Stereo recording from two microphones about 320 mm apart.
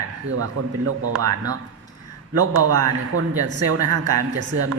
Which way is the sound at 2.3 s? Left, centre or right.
Right.